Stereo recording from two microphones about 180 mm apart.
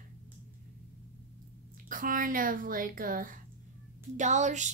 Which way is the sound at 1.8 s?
50° right (ahead or behind).